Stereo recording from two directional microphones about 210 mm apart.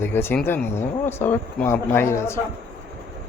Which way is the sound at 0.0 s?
10° left (ahead or behind).